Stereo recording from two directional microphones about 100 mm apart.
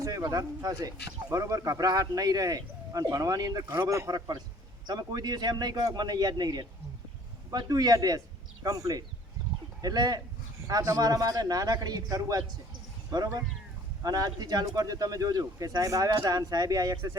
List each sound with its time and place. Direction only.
0.0 s speech: 35° right (ahead or behind)